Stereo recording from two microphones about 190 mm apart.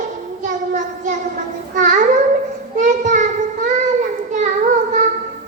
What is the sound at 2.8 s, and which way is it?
Child singing, 40° right (ahead or behind).